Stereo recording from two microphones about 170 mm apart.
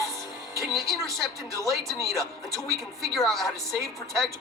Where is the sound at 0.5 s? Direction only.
Centre (ahead or behind).